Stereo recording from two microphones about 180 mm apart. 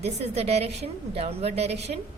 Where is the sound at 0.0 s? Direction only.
35° right (ahead or behind).